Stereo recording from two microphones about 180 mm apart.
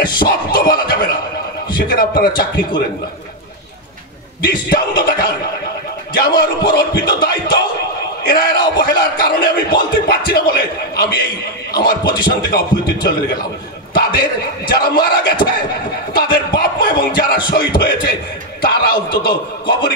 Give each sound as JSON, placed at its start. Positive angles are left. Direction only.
{"t": 0.0, "sound": "music", "side_deg": 55}
{"t": 1.7, "sound": "speech", "side_deg": 55}
{"t": 4.4, "sound": "speech", "side_deg": 55}
{"t": 14.7, "sound": "speech", "side_deg": 60}